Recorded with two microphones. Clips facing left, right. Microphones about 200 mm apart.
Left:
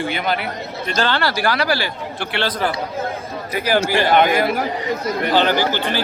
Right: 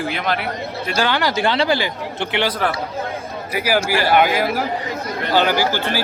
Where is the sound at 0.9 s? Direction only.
10° right (ahead or behind).